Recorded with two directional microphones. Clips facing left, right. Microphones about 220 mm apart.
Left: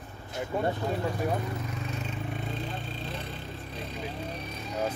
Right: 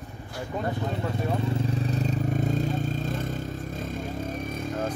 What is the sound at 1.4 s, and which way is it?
Vehicle, 30° right (ahead or behind).